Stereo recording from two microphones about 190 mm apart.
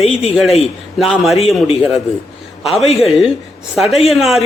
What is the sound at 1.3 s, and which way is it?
Speech, 35° left (ahead or behind).